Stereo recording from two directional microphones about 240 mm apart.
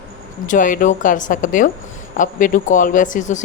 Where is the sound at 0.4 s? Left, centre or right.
Left.